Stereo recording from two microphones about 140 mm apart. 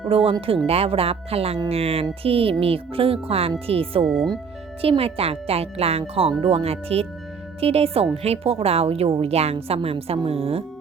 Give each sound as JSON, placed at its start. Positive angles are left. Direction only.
{"t": 0.1, "sound": "speech", "side_deg": -40}
{"t": 4.0, "sound": "speech", "side_deg": 0}
{"t": 4.8, "sound": "speech", "side_deg": -45}